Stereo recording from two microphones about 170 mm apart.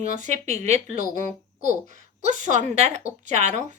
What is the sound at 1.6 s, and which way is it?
Speech, 55° left (ahead or behind).